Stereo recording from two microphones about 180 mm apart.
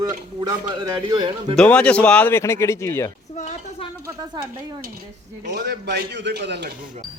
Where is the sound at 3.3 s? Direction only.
40° left (ahead or behind).